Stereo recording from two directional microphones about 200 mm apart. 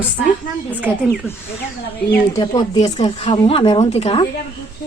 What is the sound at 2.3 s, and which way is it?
A woman's voice, 20° left (ahead or behind).